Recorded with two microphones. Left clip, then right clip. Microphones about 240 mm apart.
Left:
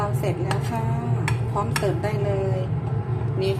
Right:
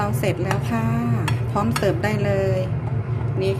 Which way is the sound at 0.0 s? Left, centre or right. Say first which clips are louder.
Right 3 dB; centre.